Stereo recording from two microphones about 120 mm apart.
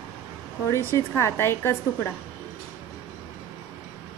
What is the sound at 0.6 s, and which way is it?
A woman's voice, 25° left (ahead or behind).